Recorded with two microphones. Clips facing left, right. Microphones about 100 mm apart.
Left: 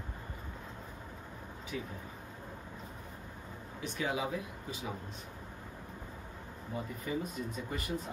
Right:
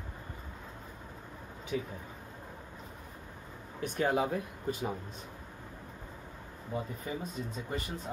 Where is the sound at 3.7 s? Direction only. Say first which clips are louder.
Right 6 dB; 50° right (ahead or behind).